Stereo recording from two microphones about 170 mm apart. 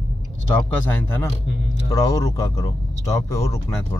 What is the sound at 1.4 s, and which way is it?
Speech, 90° left.